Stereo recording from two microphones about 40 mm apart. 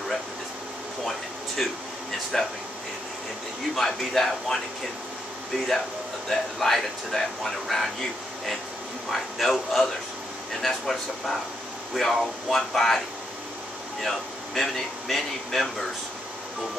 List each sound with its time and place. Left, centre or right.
1.6 s a man's voice: centre
3.7 s a man's voice: centre
6.2 s speech: centre
9.1 s speech: centre
14.0 s speech: centre